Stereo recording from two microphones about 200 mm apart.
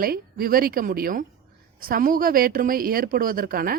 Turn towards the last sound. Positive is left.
turn(degrees=-45)  # may be behind; listen again after turning